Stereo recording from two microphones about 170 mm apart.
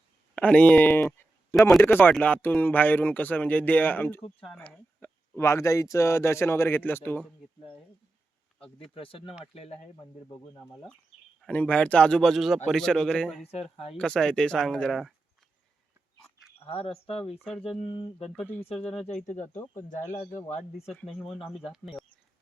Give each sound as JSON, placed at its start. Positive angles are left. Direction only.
{"t": 0.3, "sound": "speech", "side_deg": 5}
{"t": 1.5, "sound": "speech", "side_deg": 0}
{"t": 8.5, "sound": "speech", "side_deg": 5}
{"t": 9.0, "sound": "speech", "side_deg": 30}
{"t": 10.0, "sound": "speech", "side_deg": 20}
{"t": 11.3, "sound": "a man's voice", "side_deg": 5}
{"t": 16.6, "sound": "speech", "side_deg": 35}
{"t": 17.3, "sound": "a man's voice", "side_deg": 0}
{"t": 17.6, "sound": "speech", "side_deg": 35}
{"t": 18.3, "sound": "speech", "side_deg": 10}
{"t": 18.9, "sound": "speech", "side_deg": 40}
{"t": 20.9, "sound": "a man's voice", "side_deg": 0}
{"t": 21.3, "sound": "speech", "side_deg": 30}